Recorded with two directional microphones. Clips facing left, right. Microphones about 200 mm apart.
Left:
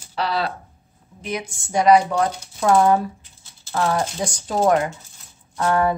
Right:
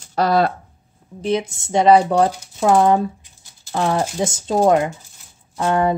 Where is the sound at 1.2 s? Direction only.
30° right (ahead or behind).